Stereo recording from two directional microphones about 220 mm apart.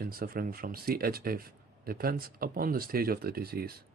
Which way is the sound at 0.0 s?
45° right (ahead or behind).